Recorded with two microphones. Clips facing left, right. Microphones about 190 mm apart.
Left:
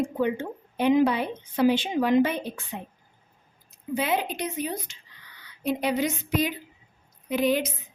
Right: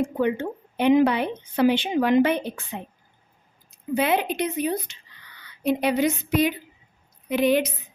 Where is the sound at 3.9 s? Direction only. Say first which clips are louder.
Right 4 dB; 65° right (ahead or behind).